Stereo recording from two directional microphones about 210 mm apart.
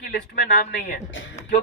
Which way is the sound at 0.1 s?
40° left (ahead or behind).